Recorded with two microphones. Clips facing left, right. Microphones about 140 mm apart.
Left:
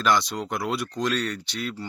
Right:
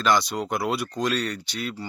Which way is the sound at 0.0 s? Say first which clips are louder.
Right 1 dB; centre (ahead or behind).